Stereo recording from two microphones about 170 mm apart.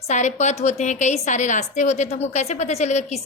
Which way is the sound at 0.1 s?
45° left (ahead or behind).